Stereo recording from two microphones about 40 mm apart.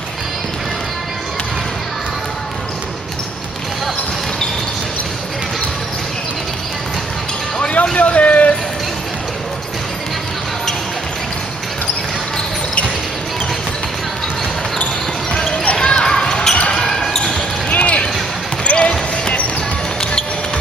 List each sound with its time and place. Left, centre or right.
7.8 s a sound: left
15.8 s basketball bounce: left
17.6 s basketball bounce: left